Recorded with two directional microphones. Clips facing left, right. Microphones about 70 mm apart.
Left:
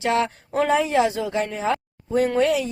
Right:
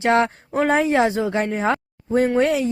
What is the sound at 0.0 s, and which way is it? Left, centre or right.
A woman's voice, right.